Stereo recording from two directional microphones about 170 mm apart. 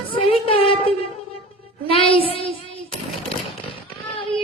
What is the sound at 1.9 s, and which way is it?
Child singing, 35° left (ahead or behind).